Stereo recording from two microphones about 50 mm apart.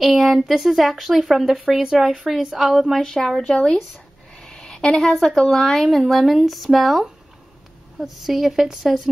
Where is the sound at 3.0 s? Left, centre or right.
Centre.